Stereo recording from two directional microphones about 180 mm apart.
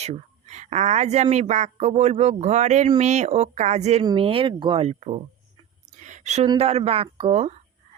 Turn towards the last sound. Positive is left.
turn(degrees=-35)  # may be behind; listen again after turning